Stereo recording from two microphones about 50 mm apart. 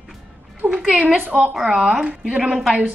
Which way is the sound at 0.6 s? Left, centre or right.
Right.